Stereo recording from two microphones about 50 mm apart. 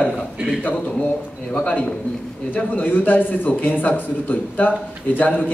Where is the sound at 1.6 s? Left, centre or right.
Left.